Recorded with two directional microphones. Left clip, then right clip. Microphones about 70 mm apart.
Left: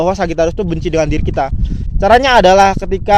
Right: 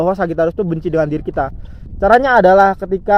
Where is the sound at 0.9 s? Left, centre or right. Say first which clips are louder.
Left 3 dB; left.